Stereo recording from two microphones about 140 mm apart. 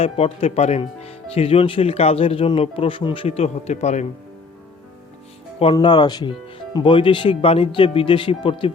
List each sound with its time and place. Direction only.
0.0 s speech: 45° left (ahead or behind)
5.7 s speech: 30° left (ahead or behind)